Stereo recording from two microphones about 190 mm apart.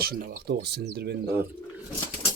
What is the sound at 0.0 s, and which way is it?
Speech, 55° right (ahead or behind).